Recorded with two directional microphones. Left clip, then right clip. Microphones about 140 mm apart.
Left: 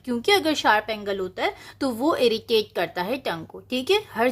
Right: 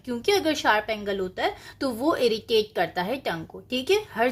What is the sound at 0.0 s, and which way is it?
A woman's voice, 35° left (ahead or behind).